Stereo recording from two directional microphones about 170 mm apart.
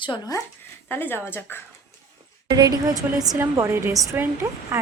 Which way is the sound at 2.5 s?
20° right (ahead or behind).